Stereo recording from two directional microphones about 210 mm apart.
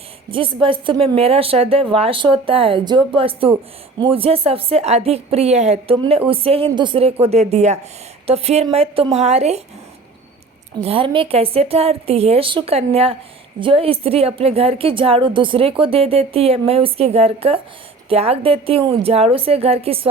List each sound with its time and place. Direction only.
0.3 s speech: 25° right (ahead or behind)
10.8 s speech: 25° right (ahead or behind)